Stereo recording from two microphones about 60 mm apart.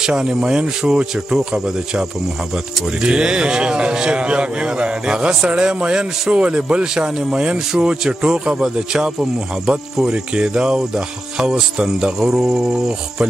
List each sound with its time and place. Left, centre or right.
0.0 s a man's voice: centre